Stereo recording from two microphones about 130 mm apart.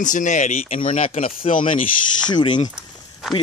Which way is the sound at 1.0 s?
45° left (ahead or behind).